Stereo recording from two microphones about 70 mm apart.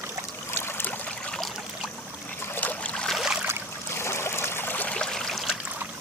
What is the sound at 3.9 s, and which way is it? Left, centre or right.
Stream, left.